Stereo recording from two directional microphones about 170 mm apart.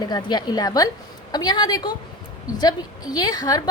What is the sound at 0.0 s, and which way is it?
A woman's voice, 25° left (ahead or behind).